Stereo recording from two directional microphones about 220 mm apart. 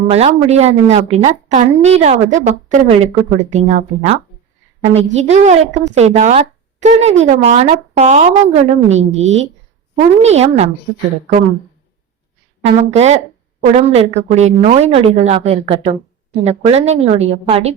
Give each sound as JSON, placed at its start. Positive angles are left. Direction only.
{"t": 0.1, "sound": "a woman's voice", "side_deg": -30}
{"t": 12.6, "sound": "a woman's voice", "side_deg": -30}